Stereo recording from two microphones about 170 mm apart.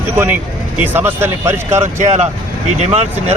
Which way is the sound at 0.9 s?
15° right (ahead or behind).